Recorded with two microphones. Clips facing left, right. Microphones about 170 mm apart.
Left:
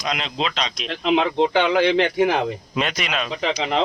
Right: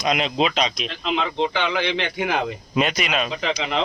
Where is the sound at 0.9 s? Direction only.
60° left (ahead or behind); by 2.4 s 35° left (ahead or behind).